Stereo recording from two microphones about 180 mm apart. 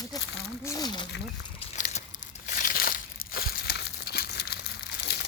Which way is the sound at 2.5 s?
45° left (ahead or behind).